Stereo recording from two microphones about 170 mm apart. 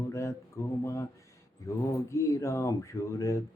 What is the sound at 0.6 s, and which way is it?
Speech, 15° left (ahead or behind).